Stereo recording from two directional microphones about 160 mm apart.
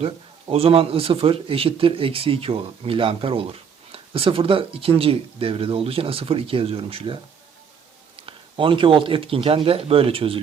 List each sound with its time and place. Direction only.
0.0 s speech: 35° right (ahead or behind)